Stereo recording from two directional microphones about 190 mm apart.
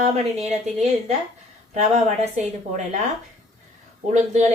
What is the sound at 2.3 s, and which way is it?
Speech, 35° right (ahead or behind).